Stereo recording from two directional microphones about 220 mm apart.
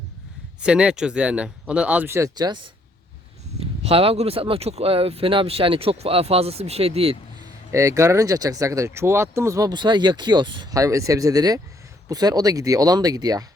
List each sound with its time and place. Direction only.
0.6 s speech: 5° right (ahead or behind)
3.6 s speech: 25° right (ahead or behind)
7.7 s speech: 15° right (ahead or behind)